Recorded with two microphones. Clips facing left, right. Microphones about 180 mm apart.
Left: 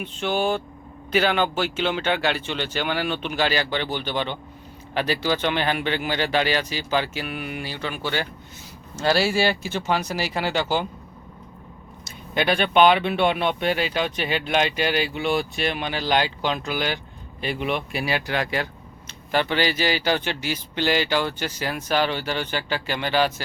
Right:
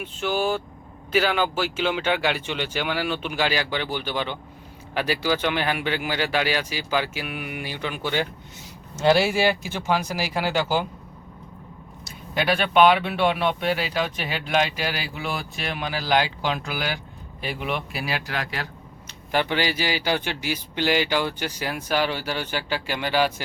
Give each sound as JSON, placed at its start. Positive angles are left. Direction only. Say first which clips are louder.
{"t": 0.0, "sound": "speech", "louder": "left 1 dB", "side_deg": -5}
{"t": 12.0, "sound": "speech", "louder": "left 1 dB", "side_deg": 0}
{"t": 19.3, "sound": "speech", "louder": "left 1 dB", "side_deg": -15}